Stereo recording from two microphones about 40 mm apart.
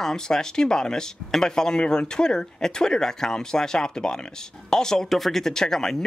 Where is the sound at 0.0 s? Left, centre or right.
Centre.